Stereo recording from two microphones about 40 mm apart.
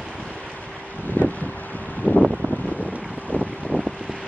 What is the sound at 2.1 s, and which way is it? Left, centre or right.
Wind noise, left.